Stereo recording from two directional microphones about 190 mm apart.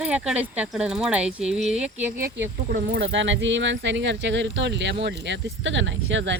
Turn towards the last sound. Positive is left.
turn(degrees=-75)  # may be behind; listen again after turning